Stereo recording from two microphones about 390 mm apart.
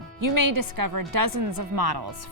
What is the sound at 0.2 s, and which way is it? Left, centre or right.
A woman's voice, right.